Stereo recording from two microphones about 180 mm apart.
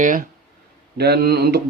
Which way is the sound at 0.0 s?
50° right (ahead or behind).